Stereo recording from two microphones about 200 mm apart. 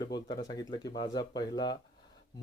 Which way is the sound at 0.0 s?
20° left (ahead or behind).